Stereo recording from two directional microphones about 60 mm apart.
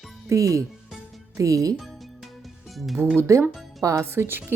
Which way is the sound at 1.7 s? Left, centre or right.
Centre.